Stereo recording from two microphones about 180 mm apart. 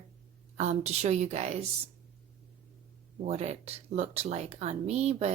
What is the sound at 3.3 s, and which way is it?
Speech, 35° right (ahead or behind).